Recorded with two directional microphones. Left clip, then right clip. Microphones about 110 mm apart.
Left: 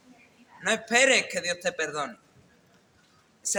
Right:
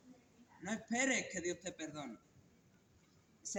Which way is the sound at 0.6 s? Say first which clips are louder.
Left 16 dB; 45° left (ahead or behind).